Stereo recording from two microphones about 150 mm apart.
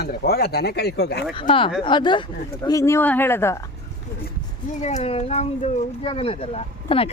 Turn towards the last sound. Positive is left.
turn(degrees=40)  # may be behind; listen again after turning